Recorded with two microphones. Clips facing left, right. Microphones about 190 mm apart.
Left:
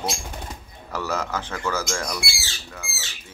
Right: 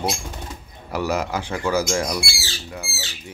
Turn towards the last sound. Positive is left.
turn(degrees=-35)  # may be behind; listen again after turning